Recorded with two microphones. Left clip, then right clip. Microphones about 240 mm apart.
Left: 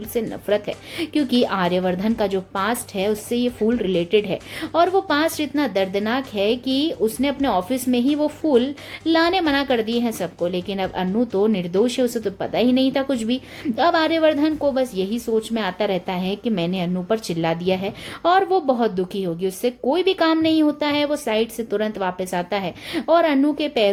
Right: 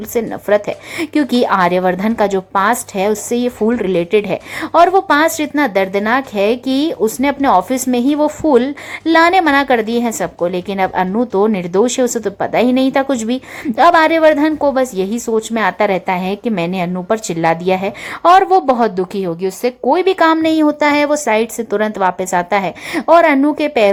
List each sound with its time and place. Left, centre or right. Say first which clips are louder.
0.1 s a woman's voice: right 7 dB; centre